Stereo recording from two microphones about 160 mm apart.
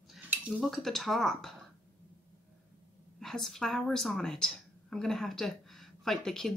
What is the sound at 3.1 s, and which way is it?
A woman's voice, 5° left (ahead or behind).